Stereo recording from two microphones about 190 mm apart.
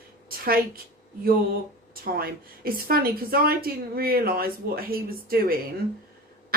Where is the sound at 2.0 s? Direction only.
50° right (ahead or behind).